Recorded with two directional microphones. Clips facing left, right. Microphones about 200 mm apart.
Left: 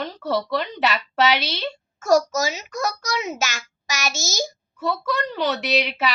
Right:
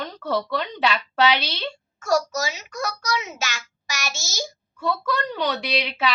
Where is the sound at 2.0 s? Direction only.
40° left (ahead or behind).